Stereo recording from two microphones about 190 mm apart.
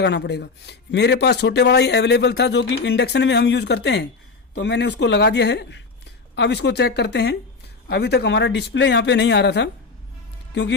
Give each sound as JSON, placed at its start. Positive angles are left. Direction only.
{"t": 0.0, "sound": "a man's voice", "side_deg": 65}